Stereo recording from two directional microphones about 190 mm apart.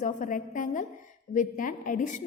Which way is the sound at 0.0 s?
40° left (ahead or behind).